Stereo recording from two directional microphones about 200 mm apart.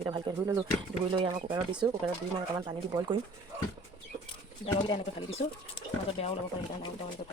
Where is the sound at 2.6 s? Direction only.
20° right (ahead or behind).